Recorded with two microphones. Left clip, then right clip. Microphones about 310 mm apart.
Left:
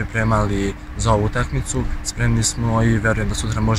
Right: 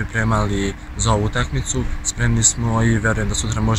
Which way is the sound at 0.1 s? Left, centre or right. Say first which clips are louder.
Left 1 dB; centre.